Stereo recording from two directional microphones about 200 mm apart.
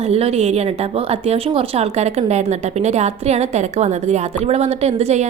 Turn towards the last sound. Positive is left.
turn(degrees=-35)  # may be behind; listen again after turning